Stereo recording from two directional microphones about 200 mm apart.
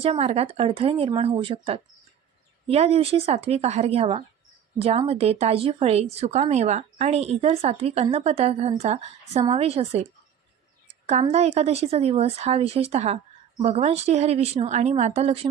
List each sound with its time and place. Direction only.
0.0 s a woman's voice: 30° right (ahead or behind)